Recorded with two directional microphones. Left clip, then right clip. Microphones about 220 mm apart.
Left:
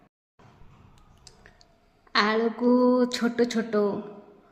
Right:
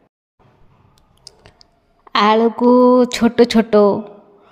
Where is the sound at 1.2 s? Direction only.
30° right (ahead or behind).